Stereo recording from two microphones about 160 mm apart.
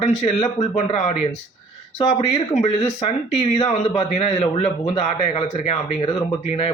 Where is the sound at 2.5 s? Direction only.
45° left (ahead or behind).